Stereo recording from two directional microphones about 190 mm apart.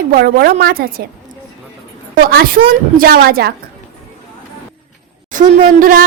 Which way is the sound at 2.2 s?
50° right (ahead or behind).